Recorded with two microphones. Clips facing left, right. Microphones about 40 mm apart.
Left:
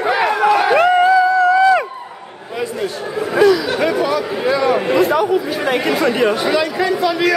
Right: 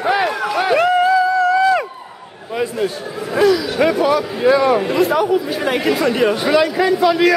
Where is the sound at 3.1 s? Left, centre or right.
Centre.